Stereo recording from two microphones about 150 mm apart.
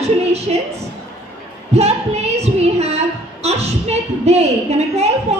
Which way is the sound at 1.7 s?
45° right (ahead or behind).